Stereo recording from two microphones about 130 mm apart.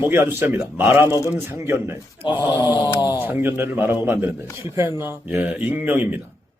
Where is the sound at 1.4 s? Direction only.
20° right (ahead or behind).